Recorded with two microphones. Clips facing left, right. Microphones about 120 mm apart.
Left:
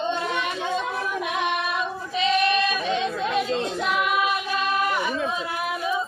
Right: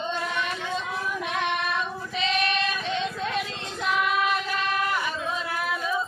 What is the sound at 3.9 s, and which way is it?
Child singing, 10° left (ahead or behind).